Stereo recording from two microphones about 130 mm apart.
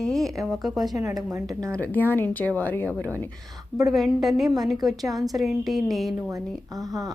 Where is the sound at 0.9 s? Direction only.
25° right (ahead or behind).